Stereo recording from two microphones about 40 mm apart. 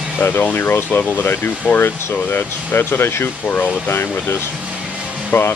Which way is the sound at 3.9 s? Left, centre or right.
Left.